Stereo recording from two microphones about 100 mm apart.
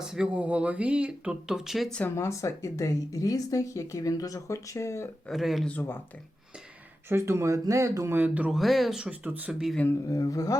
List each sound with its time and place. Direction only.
0.0 s speech: 5° right (ahead or behind)
1.9 s speech: 15° left (ahead or behind)
2.1 s speech: 30° left (ahead or behind)
5.3 s speech: centre (ahead or behind)
5.6 s speech: 15° left (ahead or behind)
7.1 s speech: 30° right (ahead or behind)
8.1 s speech: 15° right (ahead or behind)
8.4 s speech: centre (ahead or behind)
10.1 s speech: 35° left (ahead or behind)